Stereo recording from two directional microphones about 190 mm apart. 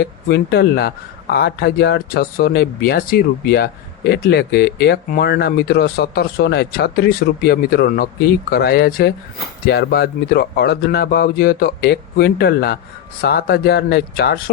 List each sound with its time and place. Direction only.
0.0 s speech: 60° left (ahead or behind)